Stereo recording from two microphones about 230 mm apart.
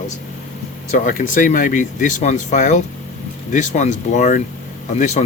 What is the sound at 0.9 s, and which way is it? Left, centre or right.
Speech, left.